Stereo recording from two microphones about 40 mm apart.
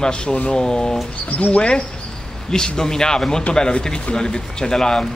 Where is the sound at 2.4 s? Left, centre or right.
Centre.